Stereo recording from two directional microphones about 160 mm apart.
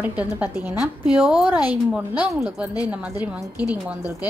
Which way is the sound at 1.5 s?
25° left (ahead or behind).